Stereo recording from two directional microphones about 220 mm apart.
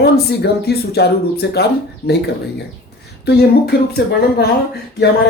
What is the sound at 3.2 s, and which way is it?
Speech, 45° left (ahead or behind).